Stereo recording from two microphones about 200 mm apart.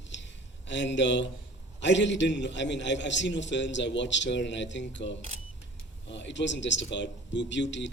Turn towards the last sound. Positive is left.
turn(degrees=65)  # may be behind; listen again after turning